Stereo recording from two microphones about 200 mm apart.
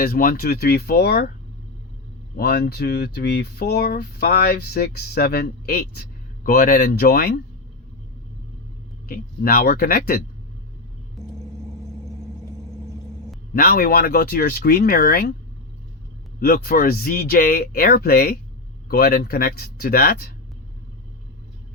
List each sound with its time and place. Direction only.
0.0 s speech: 45° left (ahead or behind)
2.3 s speech: 50° left (ahead or behind)
9.0 s speech: 50° left (ahead or behind)
11.2 s vehicle: centre (ahead or behind)
13.5 s speech: 50° left (ahead or behind)
16.4 s speech: 50° left (ahead or behind)